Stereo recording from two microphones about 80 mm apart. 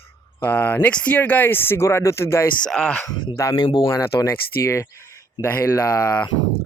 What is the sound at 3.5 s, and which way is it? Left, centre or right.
Speech, left.